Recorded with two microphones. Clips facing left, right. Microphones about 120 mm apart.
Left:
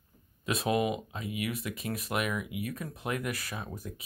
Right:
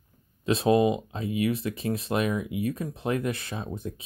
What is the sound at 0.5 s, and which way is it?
Speech, 30° right (ahead or behind).